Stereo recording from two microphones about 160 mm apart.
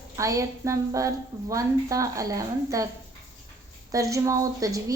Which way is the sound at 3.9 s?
20° right (ahead or behind).